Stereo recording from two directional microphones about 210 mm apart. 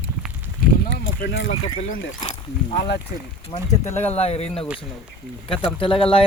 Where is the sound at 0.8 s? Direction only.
45° left (ahead or behind).